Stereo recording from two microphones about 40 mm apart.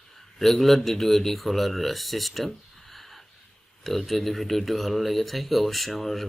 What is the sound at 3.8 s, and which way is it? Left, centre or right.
Speech, centre.